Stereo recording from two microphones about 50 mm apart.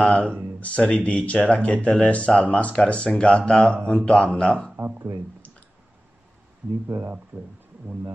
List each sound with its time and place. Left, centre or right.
0.0 s speech: centre
4.7 s speech: right
6.9 s speech: right